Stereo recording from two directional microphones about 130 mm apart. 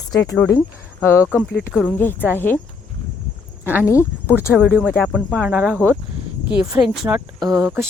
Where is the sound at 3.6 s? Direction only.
15° right (ahead or behind).